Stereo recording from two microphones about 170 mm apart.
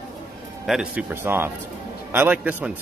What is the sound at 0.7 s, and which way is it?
Speech, 5° right (ahead or behind).